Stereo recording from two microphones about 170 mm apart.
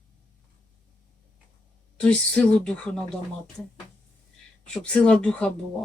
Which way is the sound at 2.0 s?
5° left (ahead or behind).